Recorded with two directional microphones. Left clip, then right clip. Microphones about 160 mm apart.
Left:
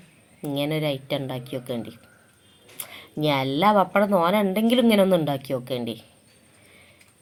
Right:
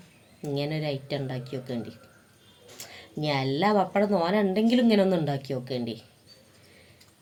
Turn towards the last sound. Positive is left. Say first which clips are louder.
# left 4 dB
turn(degrees=20)  # may be behind; listen again after turning